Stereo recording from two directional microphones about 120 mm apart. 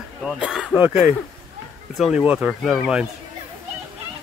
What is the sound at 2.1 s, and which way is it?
Speech, 10° right (ahead or behind).